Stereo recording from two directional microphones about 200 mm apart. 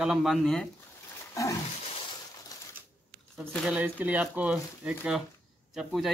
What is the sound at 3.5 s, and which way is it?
Speech, 5° right (ahead or behind).